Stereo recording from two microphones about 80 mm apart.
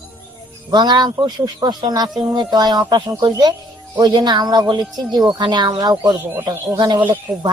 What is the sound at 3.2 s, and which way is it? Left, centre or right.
Music, right.